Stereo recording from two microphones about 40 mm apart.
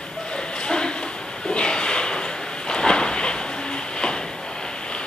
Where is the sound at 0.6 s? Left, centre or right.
Centre.